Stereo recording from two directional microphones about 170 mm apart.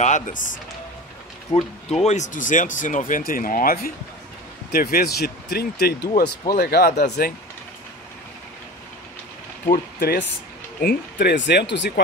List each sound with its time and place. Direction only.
0.0 s speech: 45° left (ahead or behind)
1.9 s speech: 40° left (ahead or behind); by 7.3 s 65° left (ahead or behind)
9.7 s speech: 55° left (ahead or behind)
10.8 s speech: 70° left (ahead or behind); by 11.9 s 90° left